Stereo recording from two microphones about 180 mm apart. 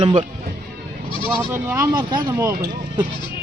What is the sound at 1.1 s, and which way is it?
Goat, 30° left (ahead or behind).